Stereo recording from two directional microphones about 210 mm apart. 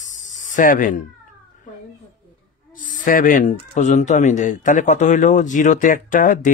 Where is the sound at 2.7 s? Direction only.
40° left (ahead or behind).